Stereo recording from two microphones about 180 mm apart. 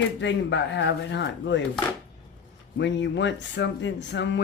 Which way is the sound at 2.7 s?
80° left.